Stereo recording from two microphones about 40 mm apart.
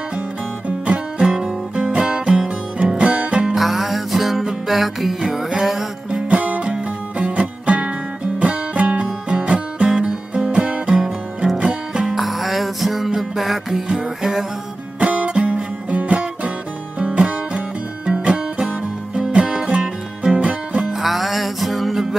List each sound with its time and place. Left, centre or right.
0.7 s music: right
1.2 s music: centre
3.5 s music: centre
6.0 s music: right
12.2 s music: centre
15.0 s music: right
20.3 s music: right
21.0 s music: centre